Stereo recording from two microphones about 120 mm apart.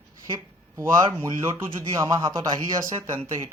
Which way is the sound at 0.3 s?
25° right (ahead or behind).